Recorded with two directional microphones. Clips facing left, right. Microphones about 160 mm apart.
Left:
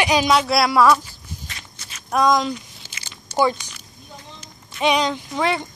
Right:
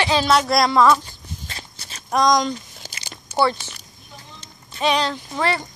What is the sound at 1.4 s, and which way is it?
Walk, 35° right (ahead or behind).